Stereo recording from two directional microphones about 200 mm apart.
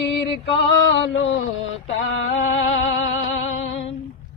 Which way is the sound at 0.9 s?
65° left (ahead or behind).